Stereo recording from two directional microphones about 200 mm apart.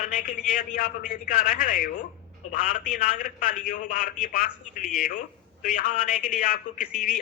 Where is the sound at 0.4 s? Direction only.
45° left (ahead or behind).